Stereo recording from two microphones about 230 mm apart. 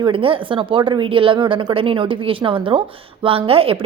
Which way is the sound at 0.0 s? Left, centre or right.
Right.